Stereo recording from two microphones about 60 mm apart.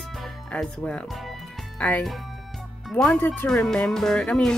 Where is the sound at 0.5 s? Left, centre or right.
Centre.